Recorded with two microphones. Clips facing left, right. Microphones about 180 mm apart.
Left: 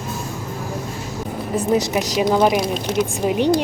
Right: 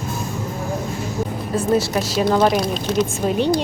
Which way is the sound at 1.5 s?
15° left (ahead or behind).